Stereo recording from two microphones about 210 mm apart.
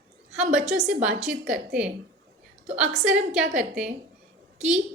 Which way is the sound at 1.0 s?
5° right (ahead or behind).